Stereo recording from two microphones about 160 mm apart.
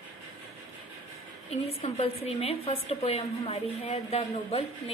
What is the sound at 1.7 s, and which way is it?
A woman's voice, 40° left (ahead or behind).